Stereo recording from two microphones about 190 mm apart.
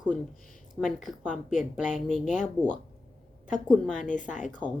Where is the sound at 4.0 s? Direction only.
40° left (ahead or behind).